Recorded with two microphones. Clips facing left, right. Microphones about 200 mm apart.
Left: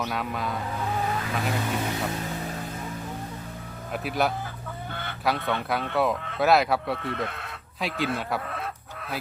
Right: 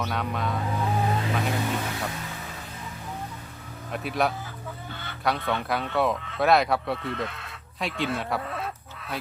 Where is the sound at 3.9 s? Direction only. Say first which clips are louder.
Even; centre (ahead or behind).